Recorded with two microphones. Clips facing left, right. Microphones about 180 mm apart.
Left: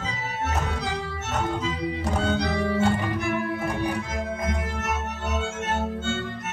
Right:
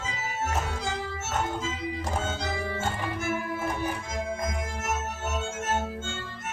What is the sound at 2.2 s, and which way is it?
Music, 65° left (ahead or behind).